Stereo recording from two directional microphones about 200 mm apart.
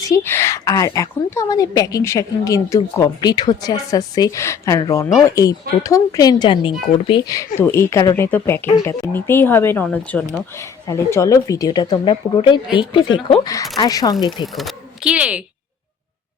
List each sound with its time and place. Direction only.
0.0 s a woman's voice: 15° left (ahead or behind)
14.4 s speech: centre (ahead or behind)